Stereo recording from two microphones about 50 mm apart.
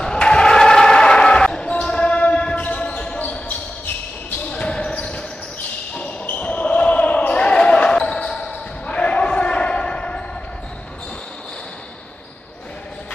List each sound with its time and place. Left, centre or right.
0.0 s basketball bounce: centre
5.9 s basketball bounce: left